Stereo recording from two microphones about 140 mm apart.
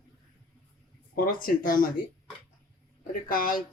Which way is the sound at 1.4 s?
80° left.